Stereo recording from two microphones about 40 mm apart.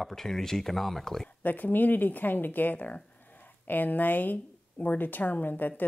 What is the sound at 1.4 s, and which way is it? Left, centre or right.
A woman's voice, left.